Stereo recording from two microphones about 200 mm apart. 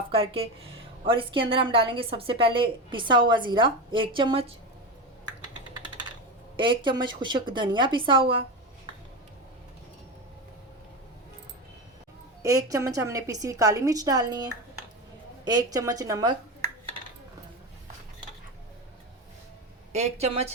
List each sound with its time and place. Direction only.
0.1 s a woman's voice: 25° right (ahead or behind)
6.6 s a woman's voice: 25° right (ahead or behind)
12.4 s a woman's voice: 15° right (ahead or behind)
19.9 s speech: 30° right (ahead or behind)